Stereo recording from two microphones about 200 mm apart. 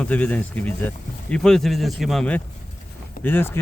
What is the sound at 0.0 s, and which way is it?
Speech, 5° left (ahead or behind).